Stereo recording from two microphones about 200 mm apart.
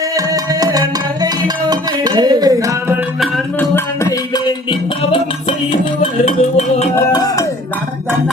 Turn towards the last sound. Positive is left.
turn(degrees=15)  # may be behind; listen again after turning